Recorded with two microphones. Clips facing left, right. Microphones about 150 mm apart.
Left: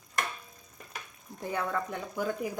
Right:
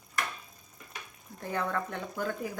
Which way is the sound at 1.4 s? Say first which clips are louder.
Even; 10° left (ahead or behind).